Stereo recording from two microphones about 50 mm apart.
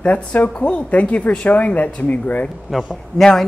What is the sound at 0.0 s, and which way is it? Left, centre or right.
A woman's voice, left.